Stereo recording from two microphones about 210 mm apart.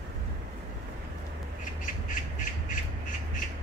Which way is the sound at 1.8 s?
40° left (ahead or behind).